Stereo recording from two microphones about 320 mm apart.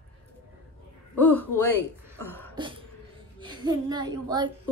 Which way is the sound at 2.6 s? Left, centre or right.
Centre.